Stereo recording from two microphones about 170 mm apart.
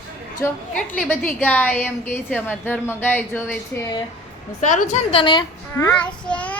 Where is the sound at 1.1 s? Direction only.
10° left (ahead or behind).